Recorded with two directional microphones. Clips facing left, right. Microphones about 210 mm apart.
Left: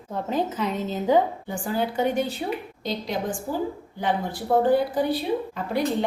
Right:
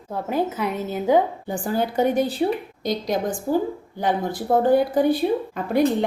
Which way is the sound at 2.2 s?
35° right (ahead or behind).